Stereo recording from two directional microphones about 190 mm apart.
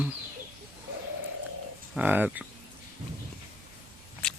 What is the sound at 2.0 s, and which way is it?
Speech, 10° right (ahead or behind).